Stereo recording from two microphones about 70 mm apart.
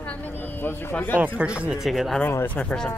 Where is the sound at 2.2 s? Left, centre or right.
Left.